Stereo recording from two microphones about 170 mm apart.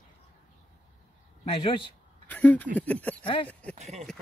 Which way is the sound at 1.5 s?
30° left (ahead or behind).